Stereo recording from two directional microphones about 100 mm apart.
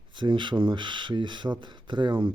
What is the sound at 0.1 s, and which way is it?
Speech, 50° right (ahead or behind).